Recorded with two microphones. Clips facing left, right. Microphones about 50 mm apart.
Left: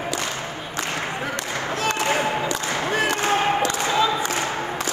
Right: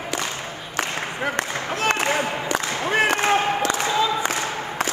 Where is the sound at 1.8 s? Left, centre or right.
Right.